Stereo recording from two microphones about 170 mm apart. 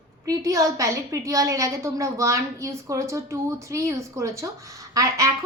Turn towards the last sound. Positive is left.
turn(degrees=-20)  # may be behind; listen again after turning